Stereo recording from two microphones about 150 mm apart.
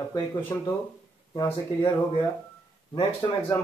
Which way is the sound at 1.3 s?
30° left (ahead or behind).